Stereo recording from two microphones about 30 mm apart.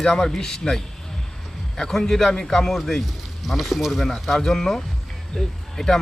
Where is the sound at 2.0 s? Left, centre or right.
Centre.